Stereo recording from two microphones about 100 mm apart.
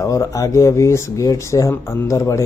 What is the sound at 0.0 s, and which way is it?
Speech, 35° left (ahead or behind).